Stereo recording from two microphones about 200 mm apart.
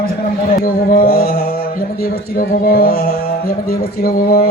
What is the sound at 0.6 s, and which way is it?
Speech, 45° left (ahead or behind).